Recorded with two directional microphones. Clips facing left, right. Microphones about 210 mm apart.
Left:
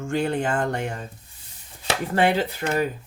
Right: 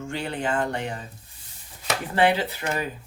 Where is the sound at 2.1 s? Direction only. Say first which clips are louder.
Even; 45° left (ahead or behind).